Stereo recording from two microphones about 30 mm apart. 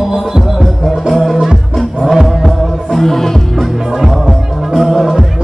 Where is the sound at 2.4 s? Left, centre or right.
Centre.